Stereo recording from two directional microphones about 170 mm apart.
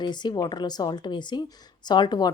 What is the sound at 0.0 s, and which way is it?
Speech, 25° left (ahead or behind).